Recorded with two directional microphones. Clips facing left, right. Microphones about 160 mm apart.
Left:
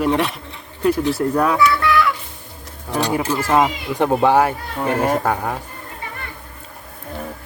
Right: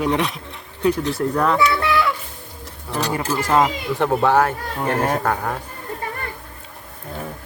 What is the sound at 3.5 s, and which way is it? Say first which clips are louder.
Speech: even; 10° left (ahead or behind).